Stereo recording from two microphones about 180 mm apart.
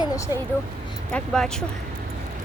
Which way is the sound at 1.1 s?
5° left (ahead or behind).